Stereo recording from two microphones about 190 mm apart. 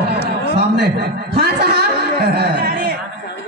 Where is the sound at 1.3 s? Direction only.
55° right (ahead or behind).